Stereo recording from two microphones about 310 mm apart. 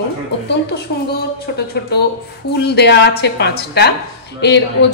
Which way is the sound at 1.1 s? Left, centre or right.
Left.